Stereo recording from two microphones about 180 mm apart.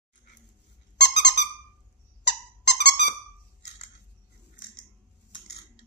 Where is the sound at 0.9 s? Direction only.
70° left (ahead or behind).